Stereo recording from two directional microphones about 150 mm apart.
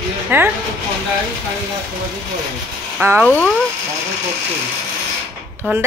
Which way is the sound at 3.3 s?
10° left (ahead or behind).